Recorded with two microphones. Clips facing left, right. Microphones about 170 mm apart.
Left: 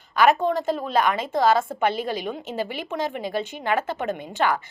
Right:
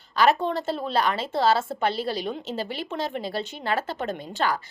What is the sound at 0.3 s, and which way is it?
A woman's voice, 15° left (ahead or behind).